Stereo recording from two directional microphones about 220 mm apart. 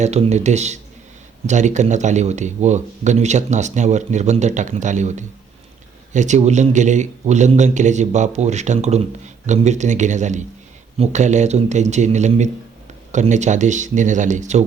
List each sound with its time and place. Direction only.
0.0 s speech: 30° right (ahead or behind)